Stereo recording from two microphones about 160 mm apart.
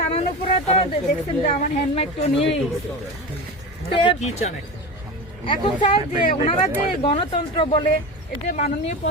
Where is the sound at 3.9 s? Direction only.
35° left (ahead or behind).